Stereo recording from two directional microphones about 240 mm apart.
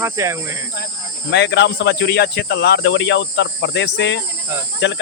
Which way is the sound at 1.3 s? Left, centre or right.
Left.